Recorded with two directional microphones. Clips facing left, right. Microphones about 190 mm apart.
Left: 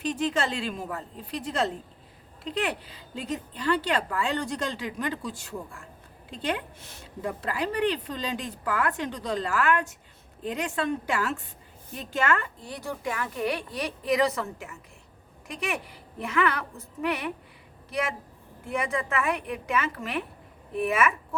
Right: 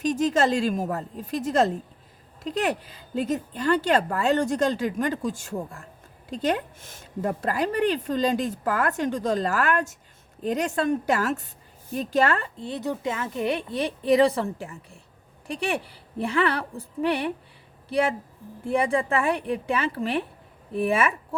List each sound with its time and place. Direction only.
0.0 s a woman's voice: 40° right (ahead or behind)